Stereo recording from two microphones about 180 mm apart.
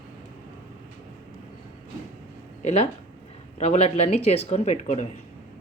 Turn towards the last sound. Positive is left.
turn(degrees=40)  # may be behind; listen again after turning